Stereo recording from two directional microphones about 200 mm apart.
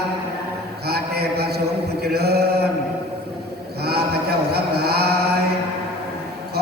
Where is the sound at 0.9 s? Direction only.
55° right (ahead or behind).